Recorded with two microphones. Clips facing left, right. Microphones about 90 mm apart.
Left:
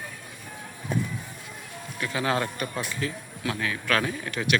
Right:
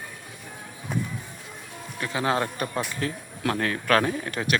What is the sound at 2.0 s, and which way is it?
Speech, 30° right (ahead or behind).